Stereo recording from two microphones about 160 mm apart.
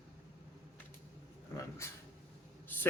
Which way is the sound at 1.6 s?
20° left (ahead or behind).